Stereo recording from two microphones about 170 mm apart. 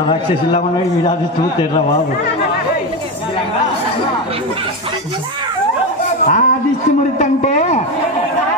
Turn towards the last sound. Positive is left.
turn(degrees=40)  # may be behind; listen again after turning